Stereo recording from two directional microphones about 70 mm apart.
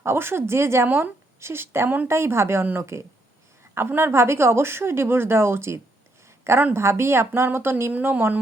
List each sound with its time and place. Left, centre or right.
0.0 s speech: right
0.9 s a woman's voice: right
1.4 s a woman's voice: right
7.9 s a woman's voice: right